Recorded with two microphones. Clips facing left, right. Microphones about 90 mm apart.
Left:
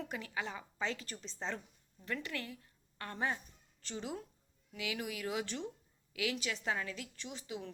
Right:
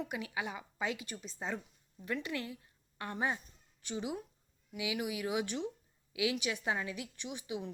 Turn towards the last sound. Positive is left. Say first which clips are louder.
# right 3 dB
turn(degrees=-15)  # may be behind; listen again after turning